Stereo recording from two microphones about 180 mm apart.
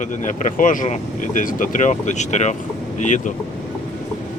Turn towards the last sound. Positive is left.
turn(degrees=45)  # may be behind; listen again after turning